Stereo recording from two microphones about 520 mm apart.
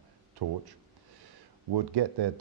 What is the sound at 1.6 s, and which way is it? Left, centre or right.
Speech, right.